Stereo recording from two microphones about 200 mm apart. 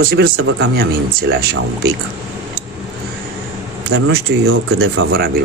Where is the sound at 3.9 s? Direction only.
90° right.